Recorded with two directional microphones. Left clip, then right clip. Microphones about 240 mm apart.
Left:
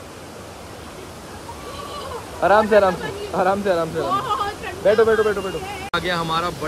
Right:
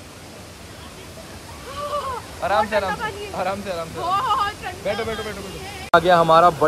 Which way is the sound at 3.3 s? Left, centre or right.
Left.